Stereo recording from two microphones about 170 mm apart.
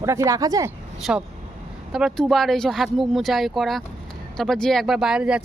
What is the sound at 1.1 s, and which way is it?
Speech, 5° right (ahead or behind).